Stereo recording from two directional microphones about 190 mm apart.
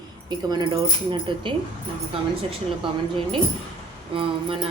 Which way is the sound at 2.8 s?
25° right (ahead or behind).